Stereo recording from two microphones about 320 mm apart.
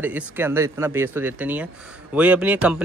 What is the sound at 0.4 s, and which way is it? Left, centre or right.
Speech, centre.